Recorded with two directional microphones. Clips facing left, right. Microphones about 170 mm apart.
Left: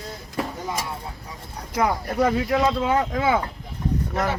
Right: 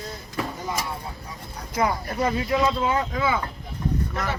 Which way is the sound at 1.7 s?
75° left (ahead or behind).